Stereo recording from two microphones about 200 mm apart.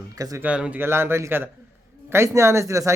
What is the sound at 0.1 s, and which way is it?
Speech, 15° right (ahead or behind).